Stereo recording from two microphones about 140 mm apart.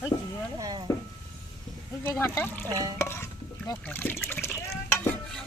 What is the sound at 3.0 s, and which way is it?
Stir, 20° left (ahead or behind).